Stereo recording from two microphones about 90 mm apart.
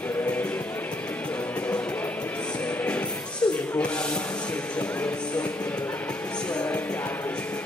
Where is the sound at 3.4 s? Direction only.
15° left (ahead or behind).